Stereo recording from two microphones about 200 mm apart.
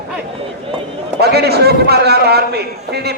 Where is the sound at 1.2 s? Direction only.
55° right (ahead or behind).